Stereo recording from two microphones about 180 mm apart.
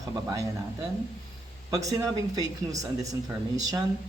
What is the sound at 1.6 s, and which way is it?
Speech, 20° right (ahead or behind).